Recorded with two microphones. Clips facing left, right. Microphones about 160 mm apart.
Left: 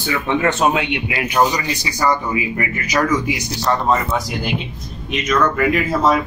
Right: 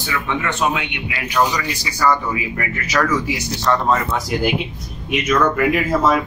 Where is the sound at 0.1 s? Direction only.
35° left (ahead or behind); by 3.3 s 15° left (ahead or behind).